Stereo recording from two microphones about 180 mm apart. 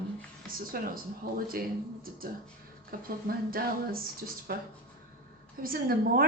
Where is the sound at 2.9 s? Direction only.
55° right (ahead or behind).